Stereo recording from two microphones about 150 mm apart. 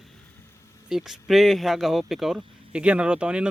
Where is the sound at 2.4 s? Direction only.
35° right (ahead or behind).